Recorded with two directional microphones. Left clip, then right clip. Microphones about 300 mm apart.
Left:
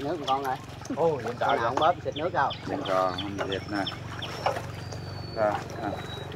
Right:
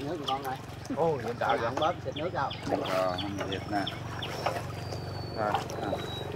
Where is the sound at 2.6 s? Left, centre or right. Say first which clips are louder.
Even; right.